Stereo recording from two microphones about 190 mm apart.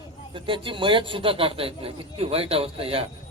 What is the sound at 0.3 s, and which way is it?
Speech, 25° right (ahead or behind).